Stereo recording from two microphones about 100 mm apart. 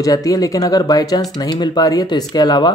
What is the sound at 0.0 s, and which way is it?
Speech, 35° left (ahead or behind).